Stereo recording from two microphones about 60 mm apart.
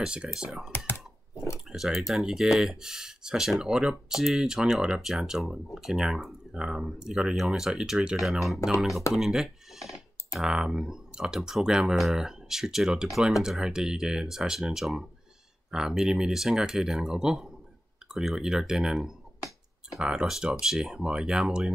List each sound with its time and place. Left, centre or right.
0.0 s speech: centre
0.7 s computer keyboard: left
1.7 s speech: centre